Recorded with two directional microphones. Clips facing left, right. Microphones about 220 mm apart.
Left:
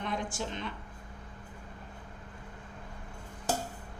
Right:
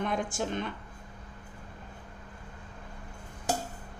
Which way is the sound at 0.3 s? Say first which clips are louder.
Right 5 dB; 50° right (ahead or behind).